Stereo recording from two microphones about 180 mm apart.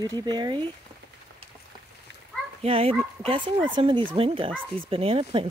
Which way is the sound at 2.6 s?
35° right (ahead or behind).